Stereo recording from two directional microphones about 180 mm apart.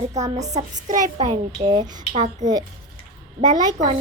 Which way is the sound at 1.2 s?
30° right (ahead or behind).